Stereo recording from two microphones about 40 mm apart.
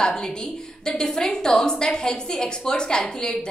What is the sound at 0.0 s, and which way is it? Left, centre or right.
A woman's voice, centre.